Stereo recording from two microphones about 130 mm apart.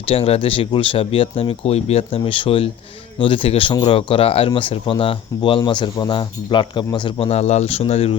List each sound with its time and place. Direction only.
0.0 s speech: 45° left (ahead or behind)
7.3 s speech: 55° left (ahead or behind)